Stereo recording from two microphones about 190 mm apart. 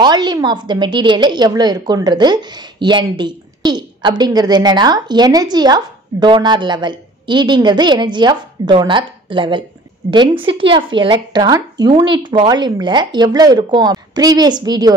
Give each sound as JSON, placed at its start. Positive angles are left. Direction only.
{"t": 0.0, "sound": "a woman's voice", "side_deg": -25}